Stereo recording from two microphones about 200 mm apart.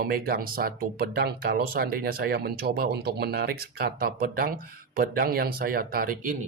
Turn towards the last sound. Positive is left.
turn(degrees=-40)  # may be behind; listen again after turning